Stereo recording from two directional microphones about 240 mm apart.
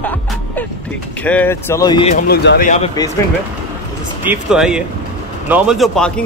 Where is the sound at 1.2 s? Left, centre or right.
Centre.